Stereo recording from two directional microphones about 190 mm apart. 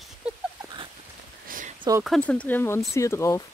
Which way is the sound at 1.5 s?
45° right (ahead or behind).